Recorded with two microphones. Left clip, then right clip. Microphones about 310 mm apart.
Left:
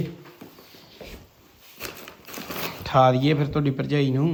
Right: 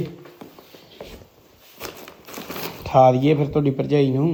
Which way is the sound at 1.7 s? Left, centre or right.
Centre.